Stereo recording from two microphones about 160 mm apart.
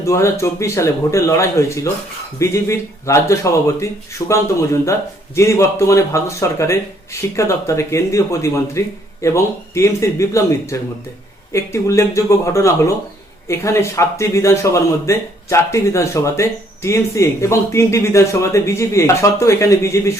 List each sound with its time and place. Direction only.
0.0 s speech: 15° left (ahead or behind)